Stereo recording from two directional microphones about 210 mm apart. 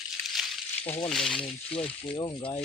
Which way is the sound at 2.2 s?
20° left (ahead or behind).